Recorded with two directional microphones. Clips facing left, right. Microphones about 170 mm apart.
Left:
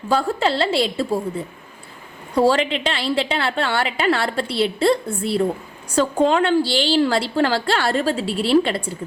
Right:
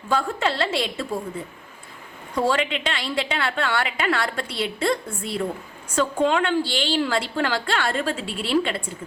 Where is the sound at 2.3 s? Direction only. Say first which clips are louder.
Left 5 dB; 35° left (ahead or behind).